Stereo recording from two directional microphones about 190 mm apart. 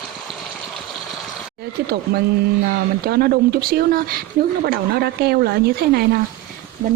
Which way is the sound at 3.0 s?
55° right (ahead or behind).